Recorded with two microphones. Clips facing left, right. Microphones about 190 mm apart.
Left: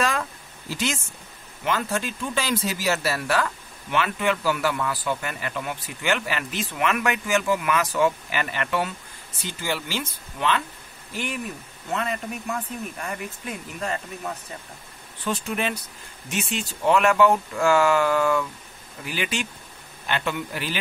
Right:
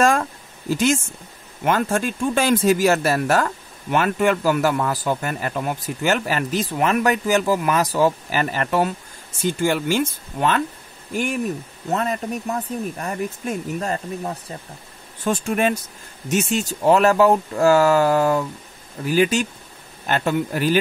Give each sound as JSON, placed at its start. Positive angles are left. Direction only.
{"t": 0.0, "sound": "a sound", "side_deg": -45}
{"t": 1.6, "sound": "speech", "side_deg": -50}
{"t": 15.2, "sound": "speech", "side_deg": -50}